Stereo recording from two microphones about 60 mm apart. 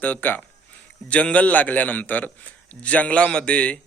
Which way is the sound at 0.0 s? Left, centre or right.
Left.